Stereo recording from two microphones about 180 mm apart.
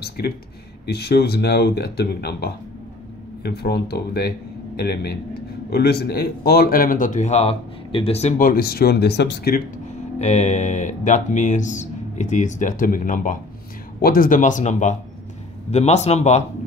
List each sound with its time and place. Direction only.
0.2 s speech: 60° left (ahead or behind)
10.1 s a man's voice: 40° left (ahead or behind)